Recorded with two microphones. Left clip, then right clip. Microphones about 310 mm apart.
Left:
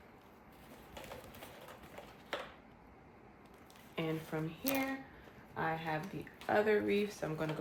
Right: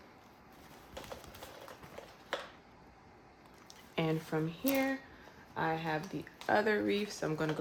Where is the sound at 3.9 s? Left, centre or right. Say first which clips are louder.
Right 4 dB; right.